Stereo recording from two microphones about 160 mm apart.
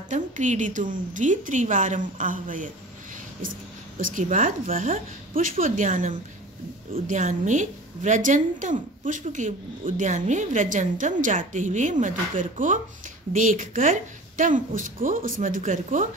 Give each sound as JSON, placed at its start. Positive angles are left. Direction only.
{"t": 0.1, "sound": "a woman's voice", "side_deg": -50}
{"t": 4.0, "sound": "a woman's voice", "side_deg": -50}